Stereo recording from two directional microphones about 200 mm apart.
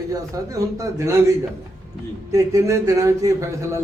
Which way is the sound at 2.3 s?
15° right (ahead or behind).